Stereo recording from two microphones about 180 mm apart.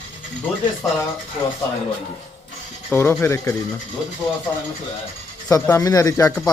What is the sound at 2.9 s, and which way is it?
Speech, 10° left (ahead or behind).